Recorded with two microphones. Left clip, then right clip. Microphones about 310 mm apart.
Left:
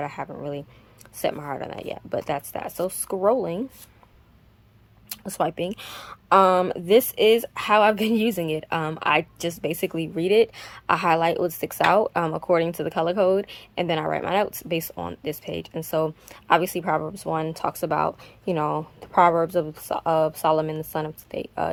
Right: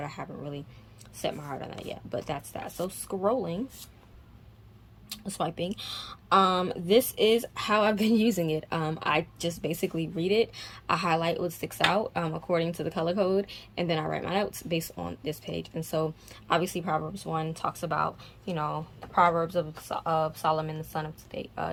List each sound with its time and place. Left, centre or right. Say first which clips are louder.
0.0 s speech: left 7 dB; centre
5.3 s speech: left 7 dB; centre